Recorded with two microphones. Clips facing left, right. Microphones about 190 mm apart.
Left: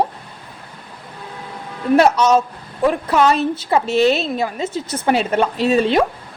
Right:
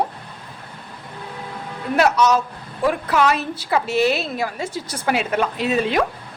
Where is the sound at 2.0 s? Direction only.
30° left (ahead or behind).